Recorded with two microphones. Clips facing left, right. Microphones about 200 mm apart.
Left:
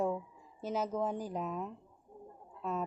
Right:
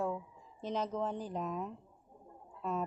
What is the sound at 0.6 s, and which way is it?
A woman's voice, 5° left (ahead or behind).